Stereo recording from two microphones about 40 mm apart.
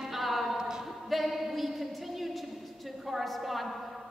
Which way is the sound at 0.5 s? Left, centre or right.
Centre.